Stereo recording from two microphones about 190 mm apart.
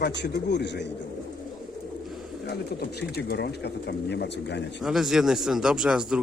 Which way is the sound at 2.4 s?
60° left (ahead or behind).